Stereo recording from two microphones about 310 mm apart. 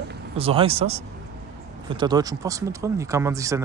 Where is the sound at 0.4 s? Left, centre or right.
Centre.